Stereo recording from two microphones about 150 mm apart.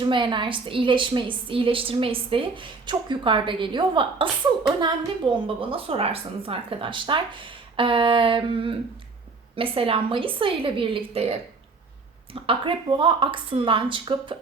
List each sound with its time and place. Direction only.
0.0 s a woman's voice: 30° right (ahead or behind)
5.3 s a woman's voice: 35° right (ahead or behind)